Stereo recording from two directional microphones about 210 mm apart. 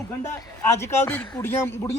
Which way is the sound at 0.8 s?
10° left (ahead or behind).